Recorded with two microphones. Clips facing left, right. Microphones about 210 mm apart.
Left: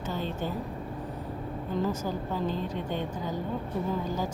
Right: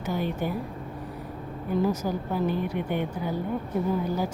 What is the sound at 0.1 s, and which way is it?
Speech, 10° right (ahead or behind).